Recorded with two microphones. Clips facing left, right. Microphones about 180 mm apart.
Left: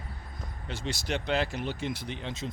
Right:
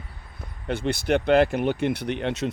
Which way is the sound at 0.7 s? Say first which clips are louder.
Right 10 dB; 55° right (ahead or behind).